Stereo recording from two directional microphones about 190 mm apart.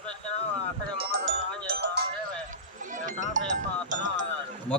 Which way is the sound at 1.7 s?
60° right (ahead or behind).